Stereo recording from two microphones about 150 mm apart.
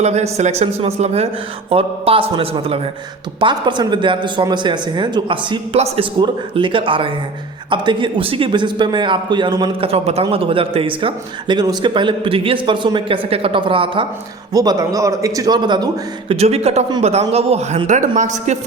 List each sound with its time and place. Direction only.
0.0 s a man's voice: 45° right (ahead or behind); by 9.9 s 30° right (ahead or behind)
9.9 s a man's voice: 45° right (ahead or behind)
14.5 s speech: 25° right (ahead or behind)
16.3 s a man's voice: 45° right (ahead or behind)